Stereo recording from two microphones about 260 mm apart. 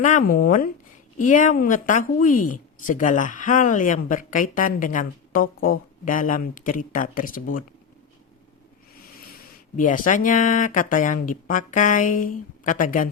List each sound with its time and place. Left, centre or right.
0.0 s speech: left
9.7 s speech: left